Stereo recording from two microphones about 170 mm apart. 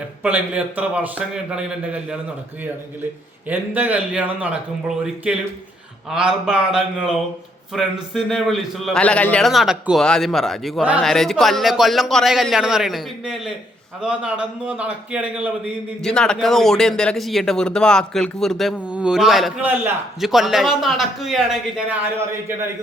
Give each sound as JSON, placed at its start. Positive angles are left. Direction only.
{"t": 0.2, "sound": "a man's voice", "side_deg": -10}
{"t": 3.5, "sound": "a man's voice", "side_deg": -10}
{"t": 16.0, "sound": "speech", "side_deg": 5}